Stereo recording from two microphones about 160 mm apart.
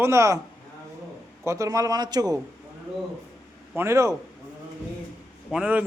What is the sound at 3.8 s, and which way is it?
Speech, 20° right (ahead or behind).